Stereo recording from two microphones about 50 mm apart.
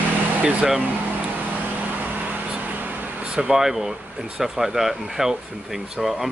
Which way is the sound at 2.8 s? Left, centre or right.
Right.